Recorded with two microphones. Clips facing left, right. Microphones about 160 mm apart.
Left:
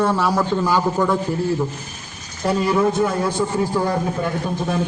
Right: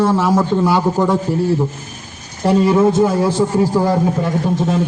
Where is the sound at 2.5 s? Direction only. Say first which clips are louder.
Right 6 dB; 25° right (ahead or behind).